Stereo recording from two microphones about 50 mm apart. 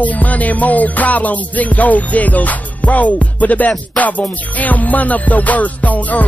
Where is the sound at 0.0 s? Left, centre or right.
Left.